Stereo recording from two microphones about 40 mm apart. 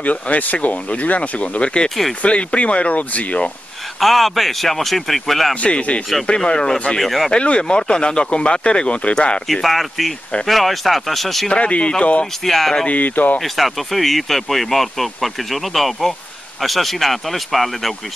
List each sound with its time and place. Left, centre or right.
0.0 s speech: left
4.0 s speech: centre
5.5 s speech: left
6.2 s speech: left
7.0 s speech: centre
7.2 s speech: left
9.5 s speech: centre
11.4 s speech: left
12.4 s speech: centre
12.8 s speech: left
13.4 s speech: centre